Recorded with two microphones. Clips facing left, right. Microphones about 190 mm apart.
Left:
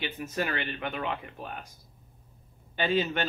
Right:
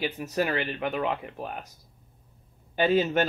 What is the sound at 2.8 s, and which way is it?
Speech, 45° right (ahead or behind).